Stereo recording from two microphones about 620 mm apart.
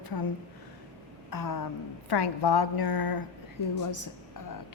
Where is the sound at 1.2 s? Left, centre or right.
Left.